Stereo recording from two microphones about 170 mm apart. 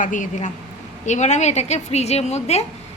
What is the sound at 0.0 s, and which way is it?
A woman's voice, 50° left (ahead or behind).